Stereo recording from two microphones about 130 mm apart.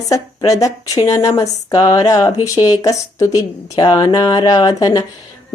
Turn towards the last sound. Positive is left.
turn(degrees=30)  # may be behind; listen again after turning